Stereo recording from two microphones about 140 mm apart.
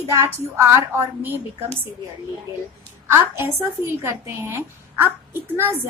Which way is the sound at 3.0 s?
20° right (ahead or behind).